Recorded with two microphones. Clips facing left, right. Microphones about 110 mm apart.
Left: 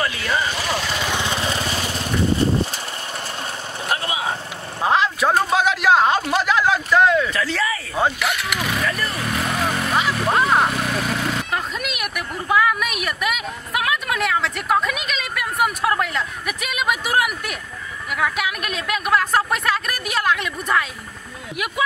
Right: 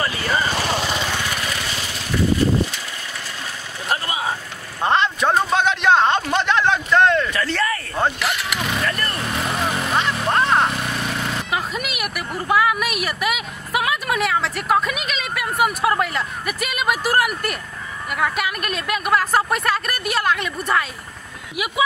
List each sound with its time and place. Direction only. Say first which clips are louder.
0.0 s vehicle: right 1 dB; centre (ahead or behind)
1.0 s lawn mower: left 2 dB; 20° left (ahead or behind)
3.9 s vehicle: right 1 dB; centre (ahead or behind)
4.8 s a sound: even; 5° left (ahead or behind)
18.1 s speech: even; centre (ahead or behind)